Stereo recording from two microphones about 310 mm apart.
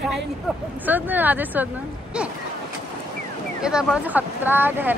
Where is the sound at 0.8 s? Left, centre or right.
Centre.